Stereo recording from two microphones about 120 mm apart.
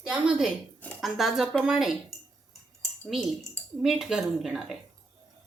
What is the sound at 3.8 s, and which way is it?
Speech, 5° right (ahead or behind).